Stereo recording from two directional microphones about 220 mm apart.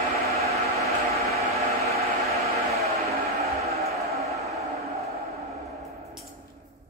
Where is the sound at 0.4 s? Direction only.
30° right (ahead or behind).